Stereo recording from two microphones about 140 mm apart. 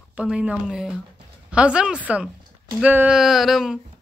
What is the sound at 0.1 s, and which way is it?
Speech, 10° right (ahead or behind).